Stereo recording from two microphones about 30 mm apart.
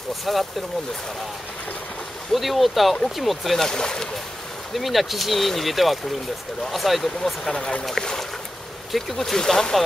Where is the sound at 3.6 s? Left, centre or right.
Centre.